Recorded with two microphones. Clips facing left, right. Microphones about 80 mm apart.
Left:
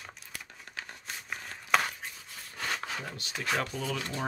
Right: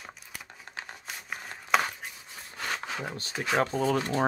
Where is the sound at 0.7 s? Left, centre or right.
Right.